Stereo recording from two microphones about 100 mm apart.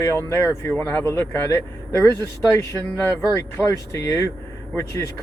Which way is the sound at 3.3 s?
30° left (ahead or behind).